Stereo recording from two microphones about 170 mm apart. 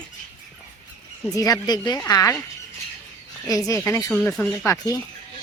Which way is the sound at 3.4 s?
20° left (ahead or behind).